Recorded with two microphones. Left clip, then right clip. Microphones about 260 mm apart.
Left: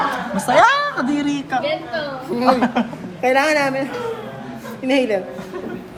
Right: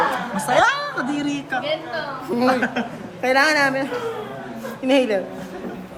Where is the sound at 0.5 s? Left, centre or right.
Centre.